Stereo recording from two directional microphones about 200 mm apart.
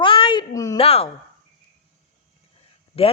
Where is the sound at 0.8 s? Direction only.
30° left (ahead or behind).